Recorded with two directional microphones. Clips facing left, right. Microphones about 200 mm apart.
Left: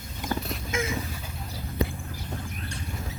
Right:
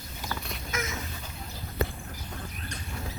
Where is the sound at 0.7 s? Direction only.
30° left (ahead or behind).